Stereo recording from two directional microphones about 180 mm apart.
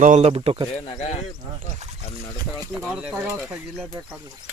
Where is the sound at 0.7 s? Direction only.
35° left (ahead or behind).